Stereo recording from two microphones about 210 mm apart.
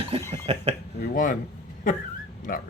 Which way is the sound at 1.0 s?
40° left (ahead or behind).